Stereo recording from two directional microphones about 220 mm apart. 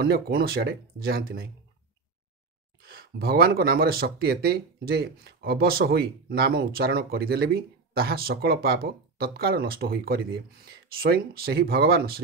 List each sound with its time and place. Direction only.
0.0 s speech: 45° right (ahead or behind)
2.8 s speech: 45° right (ahead or behind)